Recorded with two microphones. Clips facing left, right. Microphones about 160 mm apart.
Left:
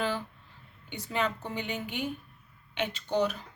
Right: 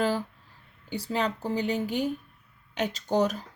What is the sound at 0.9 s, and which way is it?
Speech, 35° right (ahead or behind).